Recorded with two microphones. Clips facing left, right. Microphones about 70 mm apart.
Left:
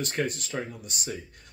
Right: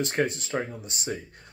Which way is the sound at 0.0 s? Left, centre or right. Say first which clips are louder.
Right 3 dB; right.